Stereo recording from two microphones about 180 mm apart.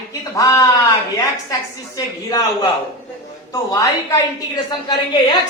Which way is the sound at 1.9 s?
20° left (ahead or behind).